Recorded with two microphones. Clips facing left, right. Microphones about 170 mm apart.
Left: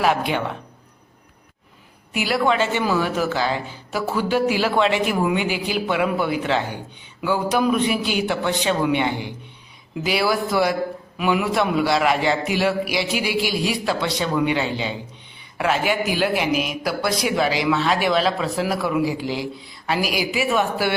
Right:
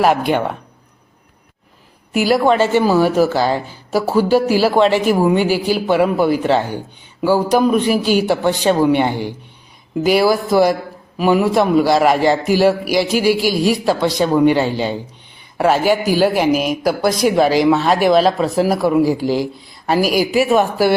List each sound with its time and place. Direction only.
0.0 s speech: 45° right (ahead or behind)
2.1 s speech: 40° right (ahead or behind)